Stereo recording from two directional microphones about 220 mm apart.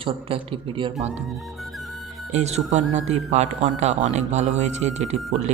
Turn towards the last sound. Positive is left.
turn(degrees=-30)  # may be behind; listen again after turning